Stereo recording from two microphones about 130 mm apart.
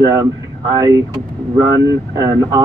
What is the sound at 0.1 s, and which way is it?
Speech, 30° right (ahead or behind).